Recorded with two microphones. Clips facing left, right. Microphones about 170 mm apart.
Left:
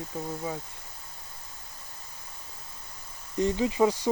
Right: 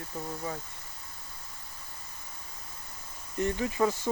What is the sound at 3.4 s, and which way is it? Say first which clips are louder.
Speech: left 4 dB; 20° left (ahead or behind).